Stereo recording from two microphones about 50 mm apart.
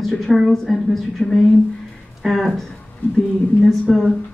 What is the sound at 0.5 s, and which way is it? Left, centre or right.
Speech, centre.